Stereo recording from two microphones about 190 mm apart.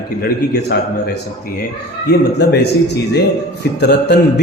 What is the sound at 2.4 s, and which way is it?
A man's voice, 60° left (ahead or behind).